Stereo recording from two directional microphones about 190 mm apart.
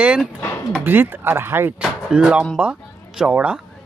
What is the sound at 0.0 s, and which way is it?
Speech, 5° right (ahead or behind).